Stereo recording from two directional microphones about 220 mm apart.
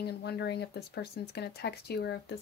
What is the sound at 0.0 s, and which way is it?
Speech, 50° left (ahead or behind).